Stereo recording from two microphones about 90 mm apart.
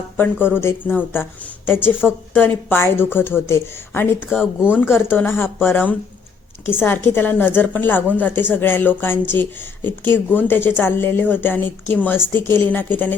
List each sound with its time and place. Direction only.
0.2 s speech: 25° left (ahead or behind)